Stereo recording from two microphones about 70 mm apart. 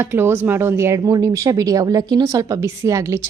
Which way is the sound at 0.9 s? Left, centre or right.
Right.